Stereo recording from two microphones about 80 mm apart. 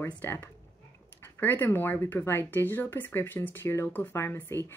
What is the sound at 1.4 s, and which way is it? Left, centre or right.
Speech, left.